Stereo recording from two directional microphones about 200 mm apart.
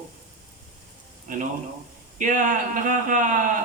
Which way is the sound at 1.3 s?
40° right (ahead or behind).